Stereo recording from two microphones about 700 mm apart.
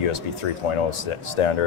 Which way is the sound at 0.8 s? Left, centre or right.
Left.